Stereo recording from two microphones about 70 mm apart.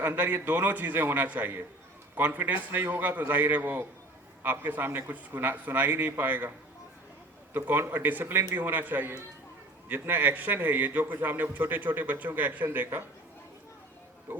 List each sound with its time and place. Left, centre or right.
0.0 s a man's voice: right
7.5 s a man's voice: right
14.3 s speech: right